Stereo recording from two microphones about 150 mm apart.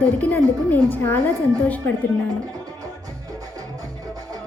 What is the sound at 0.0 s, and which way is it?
A woman's voice, 10° left (ahead or behind).